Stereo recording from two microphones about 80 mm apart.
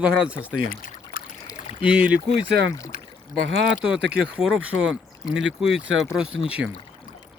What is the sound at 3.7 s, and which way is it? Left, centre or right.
Speech, centre.